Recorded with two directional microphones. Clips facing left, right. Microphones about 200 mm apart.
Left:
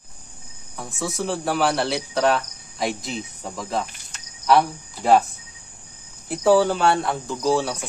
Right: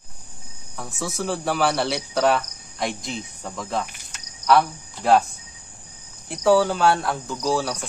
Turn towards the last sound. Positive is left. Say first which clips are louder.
# left 2 dB
turn(degrees=0)  # may be behind; listen again after turning